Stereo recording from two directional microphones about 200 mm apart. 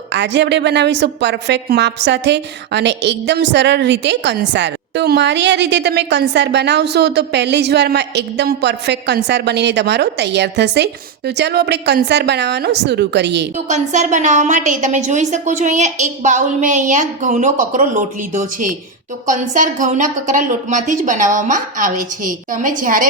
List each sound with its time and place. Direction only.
0.1 s a woman's voice: 60° right (ahead or behind)
13.7 s a woman's voice: 35° right (ahead or behind)